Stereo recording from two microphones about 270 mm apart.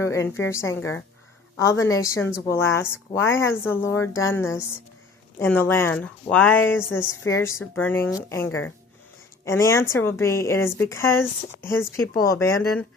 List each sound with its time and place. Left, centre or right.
0.0 s speech: centre
12.1 s speech: left
12.4 s speech: centre